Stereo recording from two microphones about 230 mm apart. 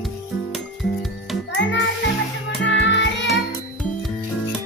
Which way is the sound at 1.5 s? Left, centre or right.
Left.